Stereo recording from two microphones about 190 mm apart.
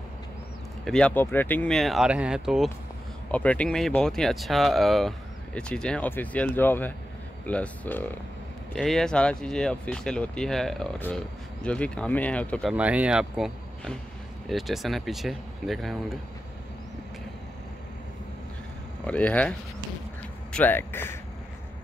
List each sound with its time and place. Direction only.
0.8 s speech: 5° left (ahead or behind)
3.3 s speech: 5° left (ahead or behind)
12.7 s speech: 5° right (ahead or behind)
19.0 s speech: 5° left (ahead or behind)
20.5 s speech: 10° left (ahead or behind)